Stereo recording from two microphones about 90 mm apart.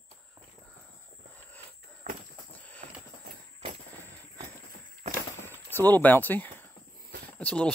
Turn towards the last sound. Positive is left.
turn(degrees=15)  # may be behind; listen again after turning